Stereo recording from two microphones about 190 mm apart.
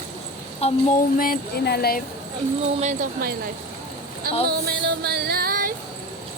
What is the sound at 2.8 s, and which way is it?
Speech, 40° right (ahead or behind).